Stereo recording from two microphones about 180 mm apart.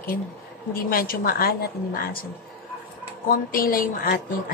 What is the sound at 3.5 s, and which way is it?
Speech, 55° left (ahead or behind).